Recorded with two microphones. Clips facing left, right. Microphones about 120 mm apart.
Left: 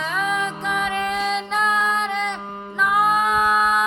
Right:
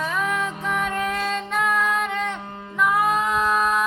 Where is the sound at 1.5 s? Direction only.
20° left (ahead or behind).